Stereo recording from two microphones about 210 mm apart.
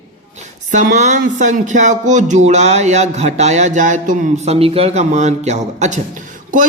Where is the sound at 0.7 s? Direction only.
35° right (ahead or behind).